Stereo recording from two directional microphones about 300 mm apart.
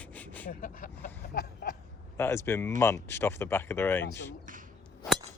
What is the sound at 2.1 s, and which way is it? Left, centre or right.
Speech, centre.